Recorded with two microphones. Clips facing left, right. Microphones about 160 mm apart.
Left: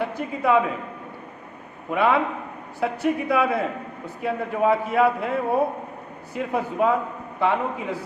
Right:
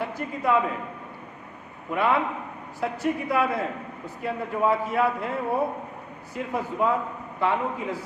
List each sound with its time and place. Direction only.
0.0 s a man's voice: 70° left (ahead or behind)
1.9 s a man's voice: 90° left
2.8 s a man's voice: 70° left (ahead or behind)